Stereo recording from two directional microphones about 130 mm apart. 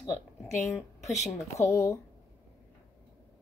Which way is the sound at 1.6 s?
20° left (ahead or behind).